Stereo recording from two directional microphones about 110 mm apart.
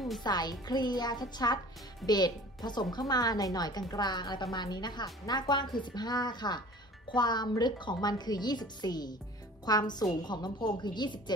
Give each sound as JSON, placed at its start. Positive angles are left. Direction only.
{"t": 0.2, "sound": "a woman's voice", "side_deg": 40}